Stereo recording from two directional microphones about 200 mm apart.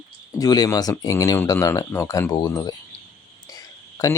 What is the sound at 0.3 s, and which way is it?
Speech, 20° left (ahead or behind).